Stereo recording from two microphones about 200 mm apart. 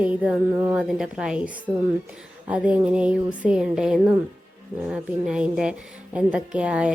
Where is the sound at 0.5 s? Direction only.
15° right (ahead or behind).